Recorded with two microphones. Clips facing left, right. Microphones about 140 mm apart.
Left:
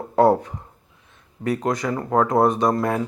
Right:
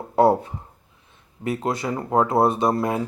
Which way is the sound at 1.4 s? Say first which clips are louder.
Left 2 dB; 25° right (ahead or behind).